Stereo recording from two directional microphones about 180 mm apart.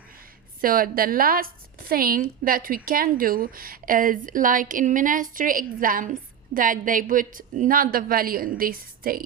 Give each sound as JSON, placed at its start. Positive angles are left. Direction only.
{"t": 0.6, "sound": "a woman's voice", "side_deg": -50}